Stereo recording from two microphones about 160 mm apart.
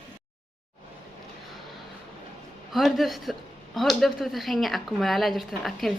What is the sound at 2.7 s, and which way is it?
A man's voice, centre (ahead or behind).